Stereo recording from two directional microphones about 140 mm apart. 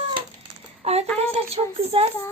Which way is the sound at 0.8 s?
50° right (ahead or behind).